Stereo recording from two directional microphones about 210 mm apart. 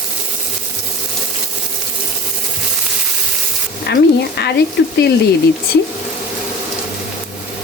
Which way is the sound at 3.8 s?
50° left (ahead or behind).